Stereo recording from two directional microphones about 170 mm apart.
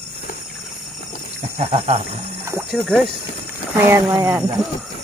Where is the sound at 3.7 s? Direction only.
15° right (ahead or behind).